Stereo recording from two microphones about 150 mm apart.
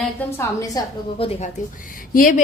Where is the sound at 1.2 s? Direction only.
40° left (ahead or behind).